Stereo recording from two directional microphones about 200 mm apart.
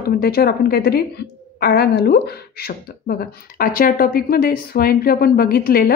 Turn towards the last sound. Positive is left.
turn(degrees=45)  # may be behind; listen again after turning